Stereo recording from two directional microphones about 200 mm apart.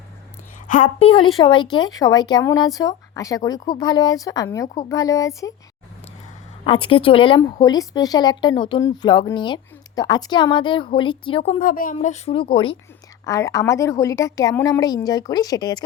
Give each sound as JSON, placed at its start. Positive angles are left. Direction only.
{"t": 0.7, "sound": "a woman's voice", "side_deg": 35}
{"t": 6.7, "sound": "speech", "side_deg": 25}
{"t": 11.6, "sound": "speech", "side_deg": 45}
{"t": 13.2, "sound": "a woman's voice", "side_deg": 15}